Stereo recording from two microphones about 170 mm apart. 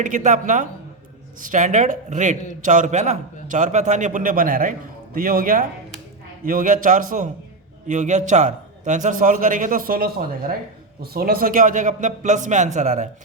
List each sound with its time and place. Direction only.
0.0 s a man's voice: 50° right (ahead or behind)